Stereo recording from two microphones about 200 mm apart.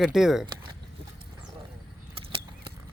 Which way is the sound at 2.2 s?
25° right (ahead or behind).